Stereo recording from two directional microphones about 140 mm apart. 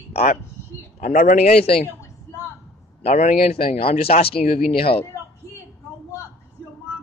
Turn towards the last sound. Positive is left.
turn(degrees=40)  # may be behind; listen again after turning